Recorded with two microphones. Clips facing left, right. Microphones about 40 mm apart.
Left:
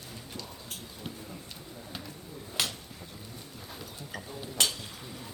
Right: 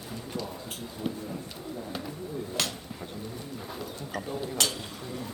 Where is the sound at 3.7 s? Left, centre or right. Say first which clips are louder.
Right 5 dB; centre.